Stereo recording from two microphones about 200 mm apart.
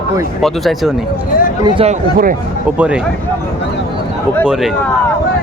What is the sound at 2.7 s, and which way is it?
Speech, 5° right (ahead or behind).